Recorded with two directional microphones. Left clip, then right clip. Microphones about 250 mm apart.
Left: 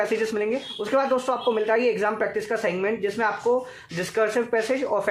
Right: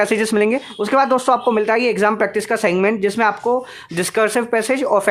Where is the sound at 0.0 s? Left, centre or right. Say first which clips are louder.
Right 8 dB; right.